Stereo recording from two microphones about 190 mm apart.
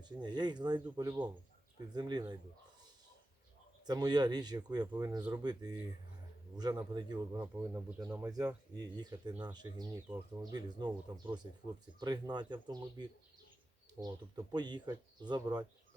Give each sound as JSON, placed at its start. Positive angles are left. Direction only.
{"t": 0.0, "sound": "speech", "side_deg": -20}
{"t": 3.8, "sound": "speech", "side_deg": -20}